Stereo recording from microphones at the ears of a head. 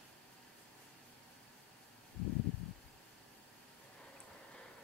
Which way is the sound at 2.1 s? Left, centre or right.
Left.